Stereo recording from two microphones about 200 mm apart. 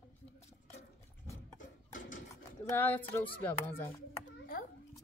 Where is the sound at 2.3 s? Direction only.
15° left (ahead or behind).